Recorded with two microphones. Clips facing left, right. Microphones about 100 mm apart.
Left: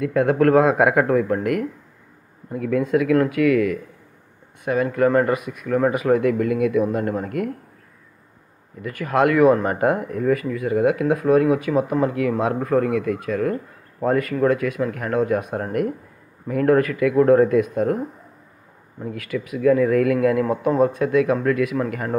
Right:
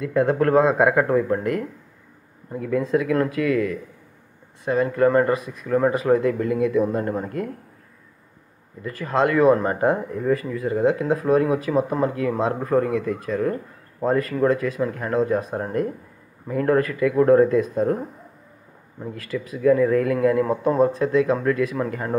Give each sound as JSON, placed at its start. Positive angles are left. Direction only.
{"t": 0.0, "sound": "speech", "side_deg": -25}
{"t": 8.8, "sound": "speech", "side_deg": -25}
{"t": 19.0, "sound": "a man's voice", "side_deg": -30}